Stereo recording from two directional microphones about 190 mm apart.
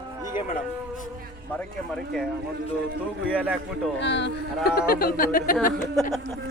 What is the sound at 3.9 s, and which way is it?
Speech, 70° left (ahead or behind).